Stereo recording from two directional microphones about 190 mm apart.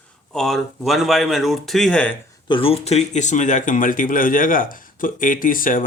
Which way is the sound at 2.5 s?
30° left (ahead or behind).